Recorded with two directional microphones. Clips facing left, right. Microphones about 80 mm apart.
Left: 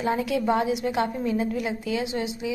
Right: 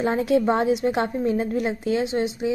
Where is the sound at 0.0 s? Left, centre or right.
Right.